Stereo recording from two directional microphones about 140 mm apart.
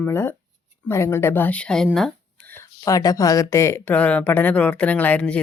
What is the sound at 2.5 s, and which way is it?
Speech, 25° left (ahead or behind).